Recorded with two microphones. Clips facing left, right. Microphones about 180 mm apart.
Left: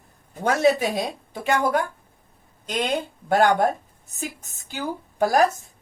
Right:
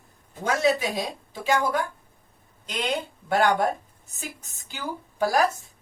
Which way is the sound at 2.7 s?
50° left (ahead or behind).